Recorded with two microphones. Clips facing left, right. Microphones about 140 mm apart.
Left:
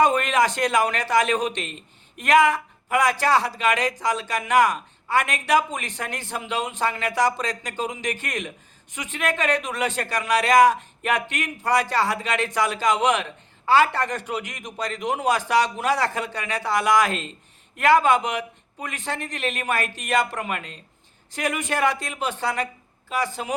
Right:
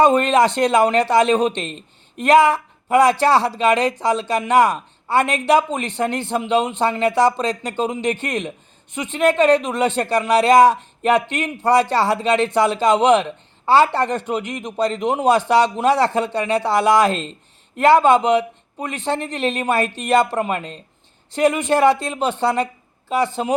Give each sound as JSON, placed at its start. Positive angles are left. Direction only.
{"t": 0.0, "sound": "speech", "side_deg": -30}